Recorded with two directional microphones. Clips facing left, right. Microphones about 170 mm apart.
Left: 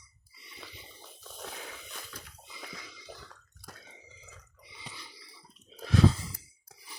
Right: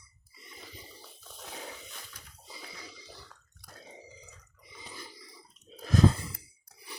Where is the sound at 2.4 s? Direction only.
35° right (ahead or behind).